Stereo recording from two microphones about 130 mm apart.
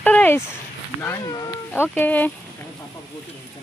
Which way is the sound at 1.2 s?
30° left (ahead or behind).